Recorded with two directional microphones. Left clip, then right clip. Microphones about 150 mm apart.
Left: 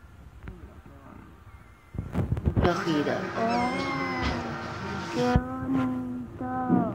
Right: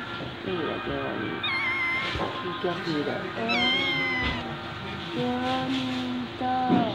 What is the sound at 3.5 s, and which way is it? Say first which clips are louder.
Speech: right 7 dB; 10° left (ahead or behind).